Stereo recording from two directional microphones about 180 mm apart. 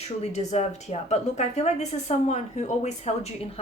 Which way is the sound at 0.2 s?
40° left (ahead or behind).